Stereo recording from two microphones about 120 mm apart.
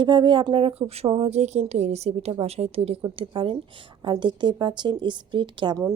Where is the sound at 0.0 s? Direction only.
40° right (ahead or behind); by 3.0 s 55° right (ahead or behind).